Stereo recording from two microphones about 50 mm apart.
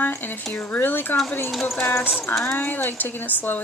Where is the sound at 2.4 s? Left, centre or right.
Left.